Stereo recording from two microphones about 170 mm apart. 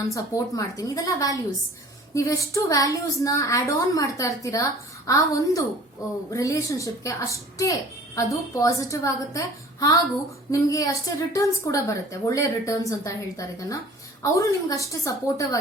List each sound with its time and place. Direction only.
0.1 s speech: 20° left (ahead or behind)